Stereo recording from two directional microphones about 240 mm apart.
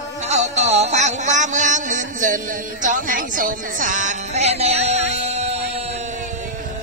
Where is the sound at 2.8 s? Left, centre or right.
Right.